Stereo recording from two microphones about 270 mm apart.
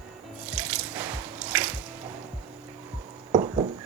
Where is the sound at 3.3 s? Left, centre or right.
Centre.